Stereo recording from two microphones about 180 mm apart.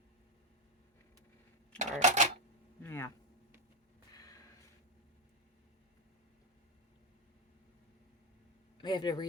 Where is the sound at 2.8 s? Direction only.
15° left (ahead or behind).